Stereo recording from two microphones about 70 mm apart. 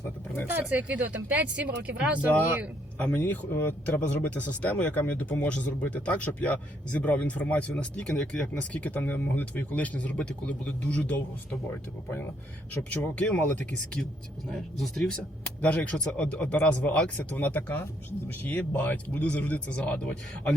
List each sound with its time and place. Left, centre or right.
0.7 s speech: right
3.0 s speech: left
13.0 s speech: centre
14.5 s speech: centre
15.6 s speech: centre